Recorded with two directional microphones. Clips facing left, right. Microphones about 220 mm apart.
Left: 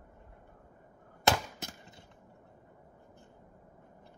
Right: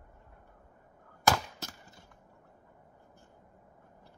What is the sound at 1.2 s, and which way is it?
Chop, 20° left (ahead or behind).